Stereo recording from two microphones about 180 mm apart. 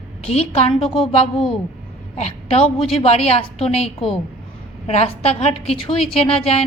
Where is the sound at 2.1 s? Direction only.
35° left (ahead or behind).